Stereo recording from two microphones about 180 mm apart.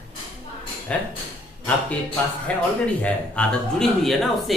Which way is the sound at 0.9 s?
5° left (ahead or behind).